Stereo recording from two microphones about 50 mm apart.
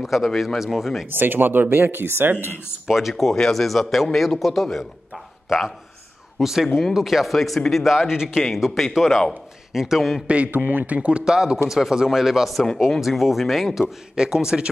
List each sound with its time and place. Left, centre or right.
0.0 s a man's voice: centre
1.1 s speech: right
2.9 s a man's voice: centre
6.4 s a man's voice: centre
10.2 s a man's voice: right
11.0 s a man's voice: right